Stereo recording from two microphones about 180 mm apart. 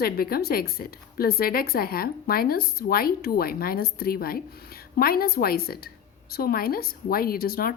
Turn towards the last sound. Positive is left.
turn(degrees=55)  # may be behind; listen again after turning